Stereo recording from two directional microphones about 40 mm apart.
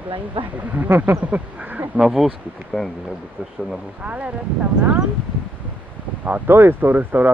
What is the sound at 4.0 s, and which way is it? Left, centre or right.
Speech, right.